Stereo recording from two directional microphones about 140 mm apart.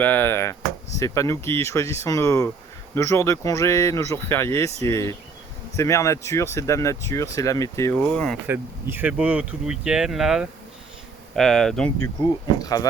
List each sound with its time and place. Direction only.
0.0 s speech: 15° left (ahead or behind)
7.9 s speech: 10° left (ahead or behind)
8.4 s speech: 15° right (ahead or behind); by 11.9 s 5° left (ahead or behind)
12.2 s speech: 25° left (ahead or behind)